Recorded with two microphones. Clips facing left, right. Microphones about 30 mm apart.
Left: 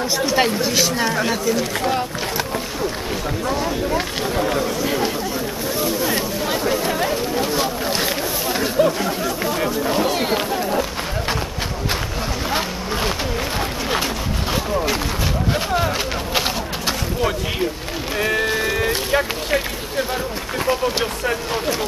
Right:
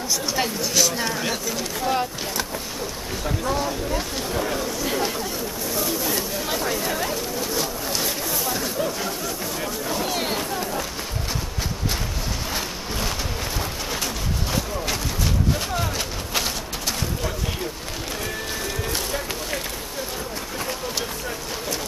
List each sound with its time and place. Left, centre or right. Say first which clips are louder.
0.4 s speech: left 4 dB; left
1.2 s speech: left 6 dB; centre
3.6 s speech: left 5 dB; left
5.8 s a sound: left 4 dB; left
6.4 s chatter: left 6 dB; centre
10.0 s chatter: left 5 dB; centre
12.4 s a sound: left 6 dB; left
18.1 s music: left 12 dB; left
18.5 s sheep: left 8 dB; left
19.1 s speech: left 8 dB; left